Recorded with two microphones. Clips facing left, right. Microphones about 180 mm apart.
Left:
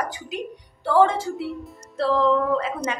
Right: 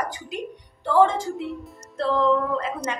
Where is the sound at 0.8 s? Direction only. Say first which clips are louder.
Even; 10° left (ahead or behind).